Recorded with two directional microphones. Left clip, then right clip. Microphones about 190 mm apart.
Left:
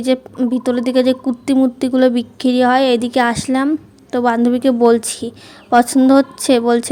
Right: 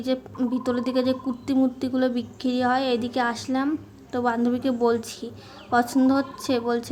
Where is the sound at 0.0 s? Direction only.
40° left (ahead or behind).